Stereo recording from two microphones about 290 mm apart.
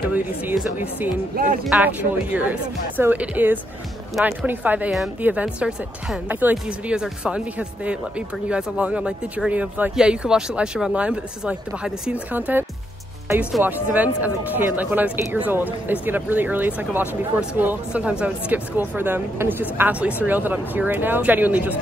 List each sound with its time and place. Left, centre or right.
0.1 s speech: centre
1.3 s speech: right
1.7 s speech: centre